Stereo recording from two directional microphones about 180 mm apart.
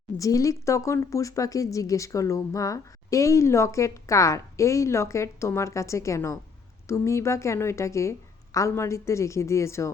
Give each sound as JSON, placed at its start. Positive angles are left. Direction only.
{"t": 0.2, "sound": "speech", "side_deg": 20}